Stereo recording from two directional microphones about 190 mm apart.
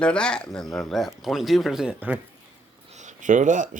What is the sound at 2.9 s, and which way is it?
Speech, 40° right (ahead or behind).